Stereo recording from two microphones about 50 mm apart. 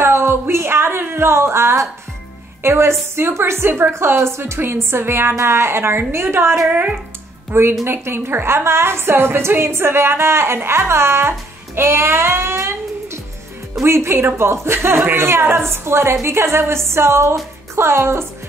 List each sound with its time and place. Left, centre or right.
0.0 s a sound: right
2.6 s a woman's voice: right
3.9 s a woman's voice: right
6.7 s speech: right
7.8 s a woman's voice: right